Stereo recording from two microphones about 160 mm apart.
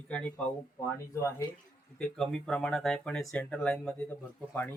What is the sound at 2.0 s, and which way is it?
Speech, 5° left (ahead or behind).